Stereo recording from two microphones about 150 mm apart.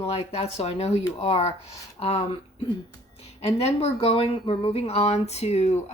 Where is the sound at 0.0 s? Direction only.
40° left (ahead or behind).